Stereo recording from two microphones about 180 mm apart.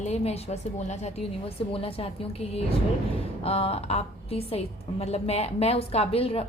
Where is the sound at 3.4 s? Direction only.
35° left (ahead or behind).